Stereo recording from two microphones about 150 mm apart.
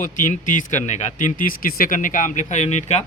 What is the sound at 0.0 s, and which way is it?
Speech, 55° left (ahead or behind).